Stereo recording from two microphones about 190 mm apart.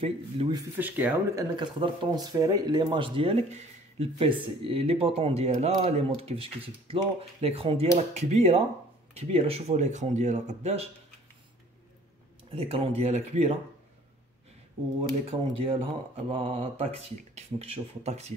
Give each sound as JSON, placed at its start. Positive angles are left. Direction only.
{"t": 0.0, "sound": "speech", "side_deg": -30}
{"t": 0.6, "sound": "speech", "side_deg": -10}
{"t": 12.5, "sound": "speech", "side_deg": -30}
{"t": 15.2, "sound": "speech", "side_deg": -30}